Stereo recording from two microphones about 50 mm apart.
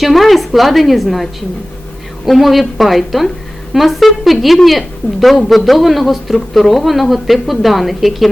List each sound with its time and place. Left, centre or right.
0.0 s a woman's voice: centre